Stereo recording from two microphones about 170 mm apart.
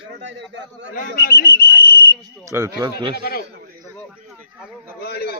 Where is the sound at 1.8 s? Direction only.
65° left (ahead or behind).